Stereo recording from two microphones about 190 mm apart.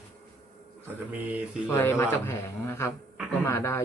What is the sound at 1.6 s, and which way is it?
Speech, 10° left (ahead or behind).